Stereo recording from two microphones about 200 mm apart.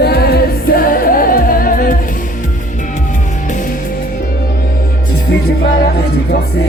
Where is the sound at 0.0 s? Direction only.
55° left (ahead or behind).